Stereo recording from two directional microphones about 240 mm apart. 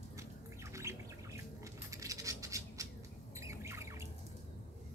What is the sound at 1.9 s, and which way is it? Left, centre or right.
Scratch, centre.